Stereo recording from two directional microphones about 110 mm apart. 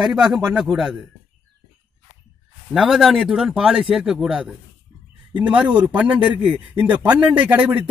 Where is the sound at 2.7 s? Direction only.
Centre (ahead or behind).